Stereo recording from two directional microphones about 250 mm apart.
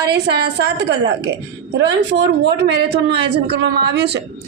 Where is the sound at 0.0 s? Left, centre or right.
Right.